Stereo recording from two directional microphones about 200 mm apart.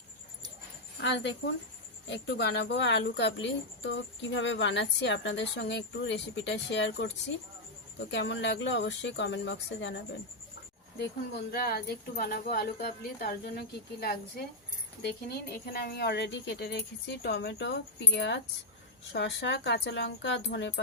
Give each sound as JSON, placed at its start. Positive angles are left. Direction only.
{"t": 1.0, "sound": "speech", "side_deg": 60}
{"t": 11.5, "sound": "speech", "side_deg": 50}